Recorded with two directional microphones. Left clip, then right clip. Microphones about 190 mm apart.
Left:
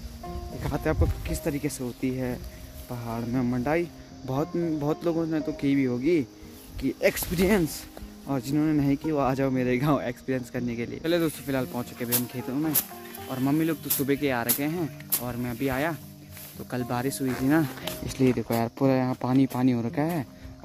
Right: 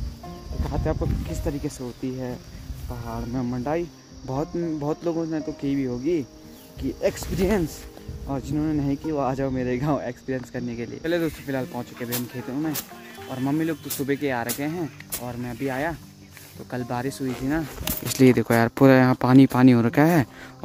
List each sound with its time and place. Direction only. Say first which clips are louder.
0.6 s speech: even; 15° left (ahead or behind); by 17.3 s centre (ahead or behind)
18.1 s speech: right 7 dB; 20° right (ahead or behind)